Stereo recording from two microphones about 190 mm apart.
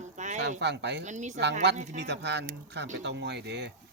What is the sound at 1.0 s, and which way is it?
Speech, 40° right (ahead or behind).